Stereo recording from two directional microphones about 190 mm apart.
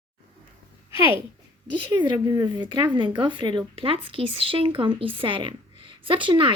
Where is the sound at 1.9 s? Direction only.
20° right (ahead or behind).